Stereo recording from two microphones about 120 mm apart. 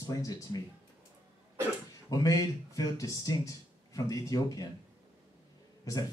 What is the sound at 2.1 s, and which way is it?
Speech, 30° left (ahead or behind).